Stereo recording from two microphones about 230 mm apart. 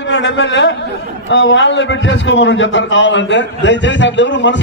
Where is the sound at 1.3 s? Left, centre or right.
Left.